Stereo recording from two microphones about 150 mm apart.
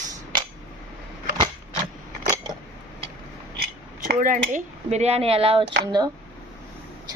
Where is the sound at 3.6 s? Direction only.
80° right; by 6.1 s 30° right (ahead or behind).